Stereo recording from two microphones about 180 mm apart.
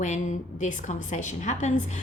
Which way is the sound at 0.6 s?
45° left (ahead or behind).